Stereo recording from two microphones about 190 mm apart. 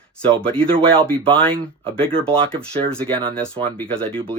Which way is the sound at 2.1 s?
5° left (ahead or behind).